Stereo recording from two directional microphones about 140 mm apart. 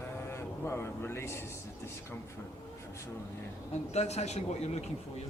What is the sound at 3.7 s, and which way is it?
A man's voice, 50° left (ahead or behind).